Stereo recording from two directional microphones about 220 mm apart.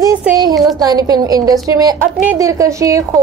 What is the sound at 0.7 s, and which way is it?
A woman's voice, 20° right (ahead or behind).